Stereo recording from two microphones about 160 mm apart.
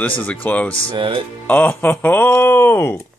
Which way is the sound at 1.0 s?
35° right (ahead or behind).